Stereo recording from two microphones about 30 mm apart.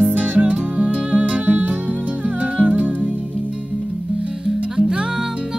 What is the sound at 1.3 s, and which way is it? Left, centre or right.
Music, right.